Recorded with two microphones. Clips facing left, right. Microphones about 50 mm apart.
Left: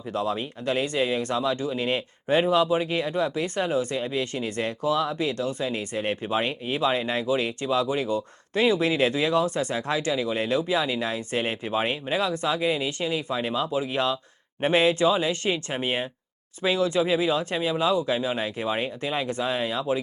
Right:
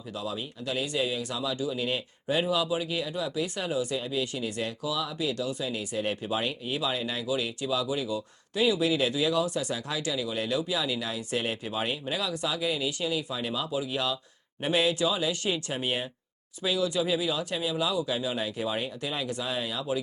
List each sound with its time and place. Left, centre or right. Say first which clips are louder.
0.1 s speech: left 7 dB; left